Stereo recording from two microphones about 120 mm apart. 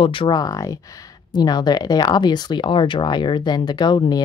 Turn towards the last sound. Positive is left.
turn(degrees=40)  # may be behind; listen again after turning